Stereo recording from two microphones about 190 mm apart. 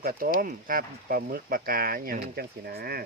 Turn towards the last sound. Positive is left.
turn(degrees=-55)  # may be behind; listen again after turning